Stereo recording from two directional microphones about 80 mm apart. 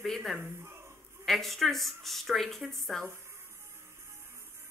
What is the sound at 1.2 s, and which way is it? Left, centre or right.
Speech, centre.